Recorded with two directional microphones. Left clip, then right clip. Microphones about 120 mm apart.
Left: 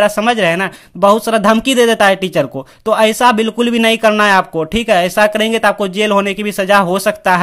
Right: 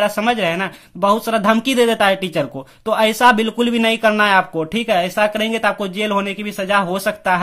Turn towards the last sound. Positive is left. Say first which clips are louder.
# left 5 dB
turn(degrees=35)  # may be behind; listen again after turning